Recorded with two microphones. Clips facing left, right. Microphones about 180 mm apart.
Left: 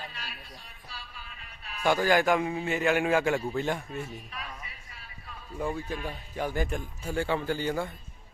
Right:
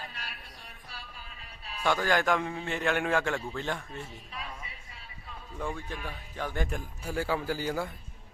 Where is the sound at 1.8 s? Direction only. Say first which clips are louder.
Left 3 dB; 10° left (ahead or behind).